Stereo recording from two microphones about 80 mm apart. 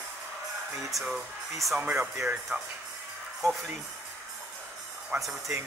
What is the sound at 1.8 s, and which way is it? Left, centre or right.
Speech, centre.